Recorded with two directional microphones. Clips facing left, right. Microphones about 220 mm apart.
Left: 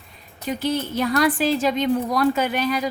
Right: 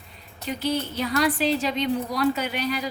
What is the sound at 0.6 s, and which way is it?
A woman's voice, 50° left (ahead or behind).